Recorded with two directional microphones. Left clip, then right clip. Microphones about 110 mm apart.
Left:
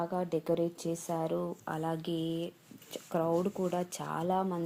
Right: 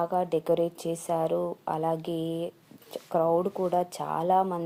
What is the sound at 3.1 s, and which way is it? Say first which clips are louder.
Speech: right 7 dB; 30° left (ahead or behind).